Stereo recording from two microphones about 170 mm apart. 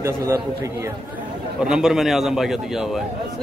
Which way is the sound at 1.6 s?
5° right (ahead or behind).